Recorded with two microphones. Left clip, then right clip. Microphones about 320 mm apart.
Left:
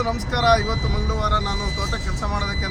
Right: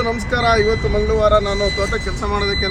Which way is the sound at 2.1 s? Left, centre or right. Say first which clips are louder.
Right 7 dB; centre.